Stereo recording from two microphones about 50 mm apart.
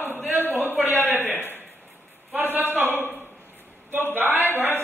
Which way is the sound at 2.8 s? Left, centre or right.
Left.